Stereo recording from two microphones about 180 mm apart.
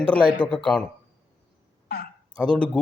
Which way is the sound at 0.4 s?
5° left (ahead or behind).